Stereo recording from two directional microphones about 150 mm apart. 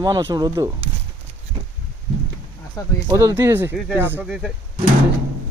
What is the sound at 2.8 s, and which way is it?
Speech, 20° left (ahead or behind).